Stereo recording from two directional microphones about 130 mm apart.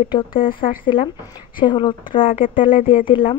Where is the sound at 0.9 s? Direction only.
40° left (ahead or behind).